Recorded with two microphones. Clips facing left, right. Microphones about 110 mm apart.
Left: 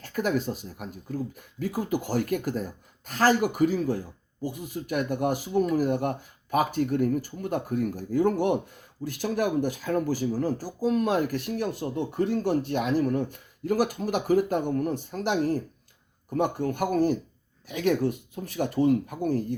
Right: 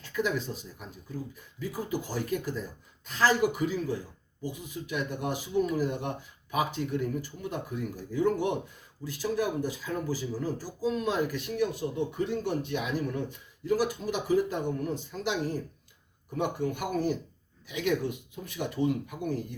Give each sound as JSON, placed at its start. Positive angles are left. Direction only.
{"t": 0.0, "sound": "speech", "side_deg": 50}
{"t": 9.0, "sound": "speech", "side_deg": 60}